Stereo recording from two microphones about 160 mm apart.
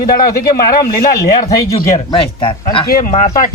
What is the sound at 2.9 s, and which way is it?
Speech, 60° left (ahead or behind).